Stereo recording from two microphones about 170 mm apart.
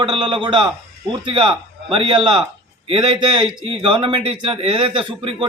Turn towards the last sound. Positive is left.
turn(degrees=-30)  # may be behind; listen again after turning